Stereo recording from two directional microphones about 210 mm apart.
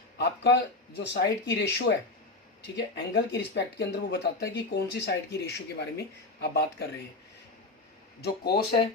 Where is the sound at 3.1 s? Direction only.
55° left (ahead or behind).